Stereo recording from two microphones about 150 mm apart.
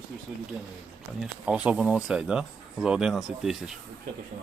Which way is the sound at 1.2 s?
10° right (ahead or behind).